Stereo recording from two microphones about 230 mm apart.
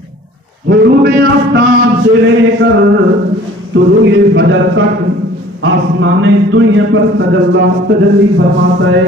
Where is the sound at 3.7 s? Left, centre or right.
Right.